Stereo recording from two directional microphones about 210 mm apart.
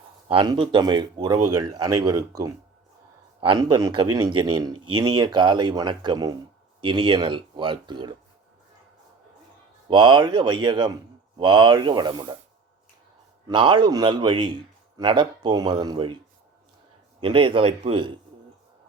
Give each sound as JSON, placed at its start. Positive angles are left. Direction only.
{"t": 0.3, "sound": "a man's voice", "side_deg": -25}
{"t": 9.9, "sound": "a man's voice", "side_deg": -20}
{"t": 13.5, "sound": "a man's voice", "side_deg": -20}
{"t": 17.2, "sound": "a man's voice", "side_deg": -25}